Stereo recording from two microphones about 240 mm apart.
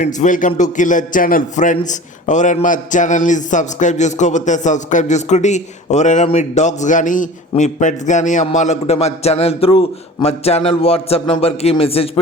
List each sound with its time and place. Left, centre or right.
0.0 s a man's voice: left